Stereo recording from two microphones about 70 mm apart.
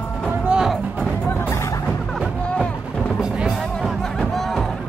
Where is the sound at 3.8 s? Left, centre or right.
Centre.